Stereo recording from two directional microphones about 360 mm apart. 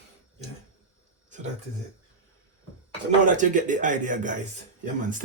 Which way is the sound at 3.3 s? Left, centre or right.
Right.